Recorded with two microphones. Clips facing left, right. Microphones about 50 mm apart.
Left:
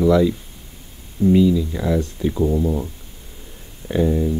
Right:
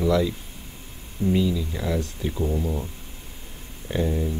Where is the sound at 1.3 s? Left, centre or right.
Centre.